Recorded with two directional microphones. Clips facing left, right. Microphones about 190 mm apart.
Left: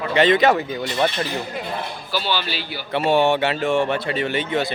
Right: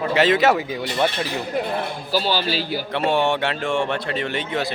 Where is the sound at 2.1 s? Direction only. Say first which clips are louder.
Right 3 dB; 40° right (ahead or behind).